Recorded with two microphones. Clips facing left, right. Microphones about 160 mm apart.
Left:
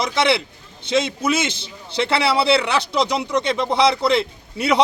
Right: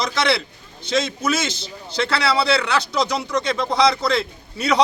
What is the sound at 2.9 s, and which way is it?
A man's voice, 25° left (ahead or behind).